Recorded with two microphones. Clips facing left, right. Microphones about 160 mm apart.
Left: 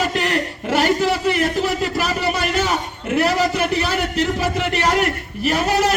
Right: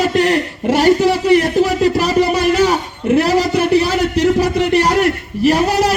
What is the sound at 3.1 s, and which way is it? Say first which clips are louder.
A man's voice: right 3 dB; 40° right (ahead or behind).